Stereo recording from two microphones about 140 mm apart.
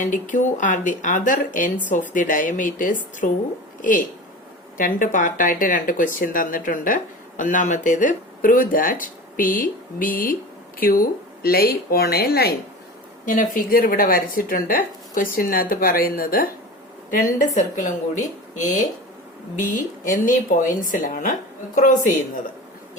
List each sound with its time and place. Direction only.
0.1 s speech: 65° left (ahead or behind); by 12.5 s 90° left
13.2 s speech: 75° left (ahead or behind); by 16.5 s 90° left
17.1 s a woman's voice: 75° left (ahead or behind)
20.1 s speech: 70° left (ahead or behind)